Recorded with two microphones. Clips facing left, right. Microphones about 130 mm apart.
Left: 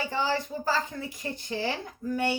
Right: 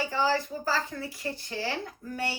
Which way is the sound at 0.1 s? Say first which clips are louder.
Right 1 dB; 20° left (ahead or behind).